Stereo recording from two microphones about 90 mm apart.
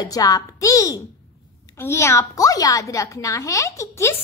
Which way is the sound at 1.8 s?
30° left (ahead or behind).